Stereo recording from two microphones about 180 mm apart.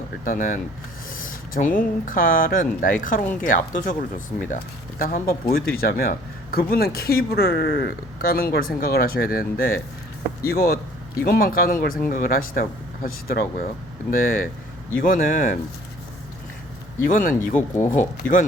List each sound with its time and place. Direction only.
0.3 s speech: 50° left (ahead or behind)
17.0 s speech: 50° left (ahead or behind)